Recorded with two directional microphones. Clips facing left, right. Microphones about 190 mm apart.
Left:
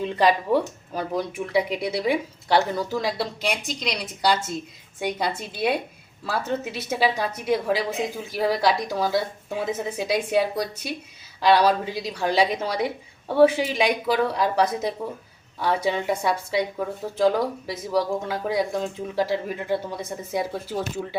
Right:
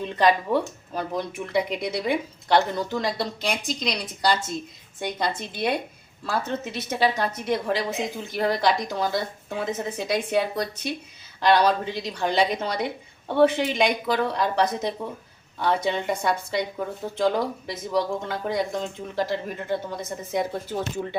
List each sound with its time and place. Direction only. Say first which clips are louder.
0.0 s a woman's voice: even; 5° left (ahead or behind)